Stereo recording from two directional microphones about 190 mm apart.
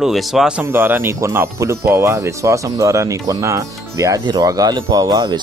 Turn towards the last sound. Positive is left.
turn(degrees=-20)  # may be behind; listen again after turning